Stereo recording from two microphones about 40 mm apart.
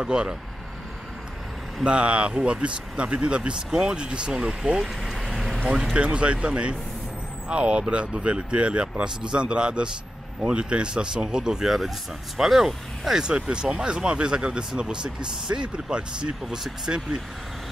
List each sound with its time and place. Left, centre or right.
0.0 s speech: centre
1.9 s speech: right
4.8 s vehicle: centre
5.3 s a sound: centre
5.9 s speech: right; by 13.2 s centre
13.2 s speech: right
16.9 s speech: right